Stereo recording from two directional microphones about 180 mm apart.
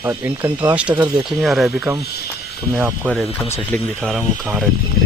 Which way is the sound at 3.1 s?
5° left (ahead or behind).